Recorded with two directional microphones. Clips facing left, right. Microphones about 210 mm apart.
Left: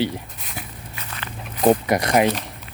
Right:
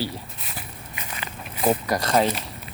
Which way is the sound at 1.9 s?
15° left (ahead or behind).